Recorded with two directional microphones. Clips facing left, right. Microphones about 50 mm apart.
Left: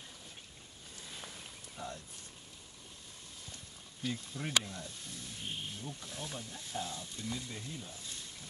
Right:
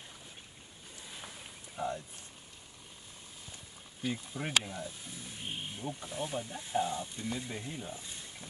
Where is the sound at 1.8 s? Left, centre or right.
Right.